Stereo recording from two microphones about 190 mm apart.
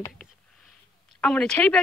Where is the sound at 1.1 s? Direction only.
5° left (ahead or behind).